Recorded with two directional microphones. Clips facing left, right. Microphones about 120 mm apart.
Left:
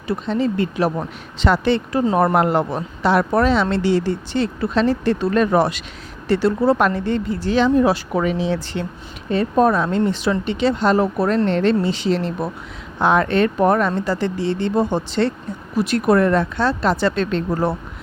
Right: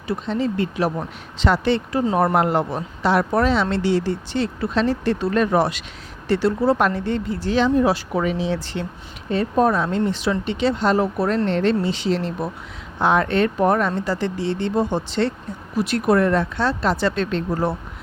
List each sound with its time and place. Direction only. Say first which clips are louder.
0.3 s speech: left 3 dB; 55° left (ahead or behind)